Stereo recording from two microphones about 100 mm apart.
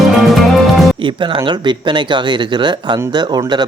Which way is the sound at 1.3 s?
50° right (ahead or behind).